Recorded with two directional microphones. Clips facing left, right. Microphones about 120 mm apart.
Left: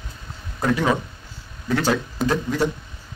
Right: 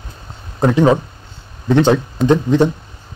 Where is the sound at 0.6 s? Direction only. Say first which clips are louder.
Right 8 dB; 25° right (ahead or behind).